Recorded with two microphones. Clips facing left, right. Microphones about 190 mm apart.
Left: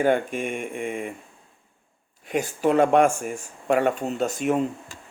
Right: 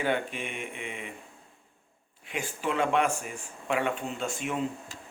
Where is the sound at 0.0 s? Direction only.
45° left (ahead or behind).